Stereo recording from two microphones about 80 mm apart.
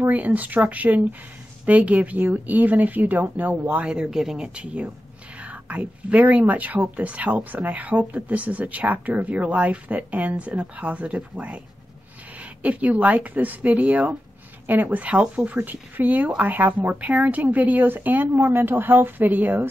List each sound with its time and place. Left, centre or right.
0.0 s speech: right